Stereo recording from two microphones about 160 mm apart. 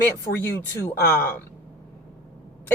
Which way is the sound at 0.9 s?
15° left (ahead or behind).